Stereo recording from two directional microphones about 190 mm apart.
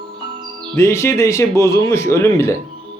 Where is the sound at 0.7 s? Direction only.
15° left (ahead or behind).